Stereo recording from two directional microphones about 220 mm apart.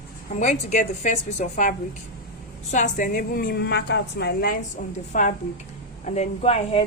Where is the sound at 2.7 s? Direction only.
35° left (ahead or behind).